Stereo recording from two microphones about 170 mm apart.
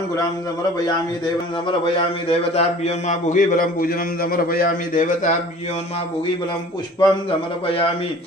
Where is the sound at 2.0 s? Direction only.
40° left (ahead or behind).